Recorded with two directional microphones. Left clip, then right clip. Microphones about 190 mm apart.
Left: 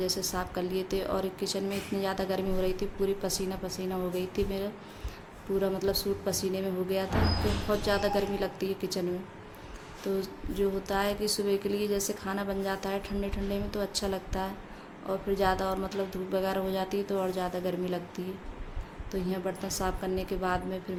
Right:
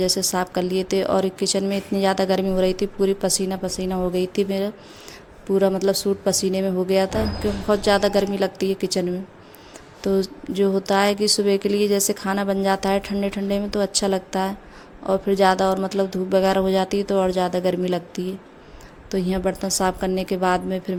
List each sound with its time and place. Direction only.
0.0 s a woman's voice: 45° right (ahead or behind)